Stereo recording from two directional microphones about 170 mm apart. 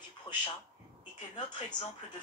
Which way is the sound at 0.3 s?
30° left (ahead or behind).